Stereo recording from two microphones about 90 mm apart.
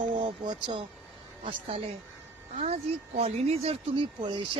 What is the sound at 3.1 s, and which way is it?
Speech, 90° right.